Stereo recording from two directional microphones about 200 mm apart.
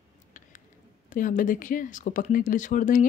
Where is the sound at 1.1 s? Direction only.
40° left (ahead or behind).